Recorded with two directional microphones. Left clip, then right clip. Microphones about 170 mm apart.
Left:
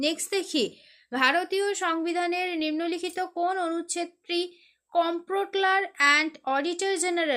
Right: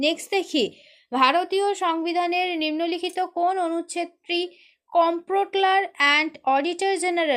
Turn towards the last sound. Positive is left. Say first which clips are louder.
# right 4 dB
turn(degrees=-20)  # may be behind; listen again after turning